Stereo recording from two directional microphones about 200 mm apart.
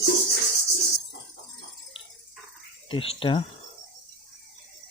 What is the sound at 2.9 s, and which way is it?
Speech, 25° left (ahead or behind).